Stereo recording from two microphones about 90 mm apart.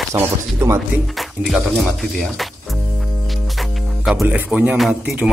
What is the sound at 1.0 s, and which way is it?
Music, centre (ahead or behind).